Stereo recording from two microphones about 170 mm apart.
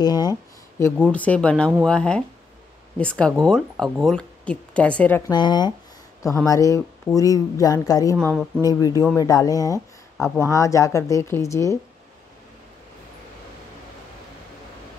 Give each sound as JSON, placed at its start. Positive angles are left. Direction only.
{"t": 0.0, "sound": "speech", "side_deg": 25}
{"t": 1.1, "sound": "speech", "side_deg": 10}
{"t": 5.3, "sound": "speech", "side_deg": 25}
{"t": 8.2, "sound": "speech", "side_deg": 5}
{"t": 8.6, "sound": "speech", "side_deg": 20}
{"t": 10.1, "sound": "speech", "side_deg": 0}
{"t": 10.4, "sound": "speech", "side_deg": 20}